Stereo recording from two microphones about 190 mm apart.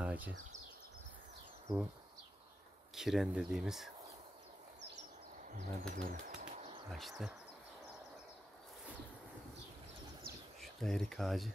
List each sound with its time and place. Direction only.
0.0 s a sound: 10° right (ahead or behind)
2.9 s speech: centre (ahead or behind)
5.6 s speech: 45° right (ahead or behind)
6.9 s speech: centre (ahead or behind)
10.6 s speech: centre (ahead or behind)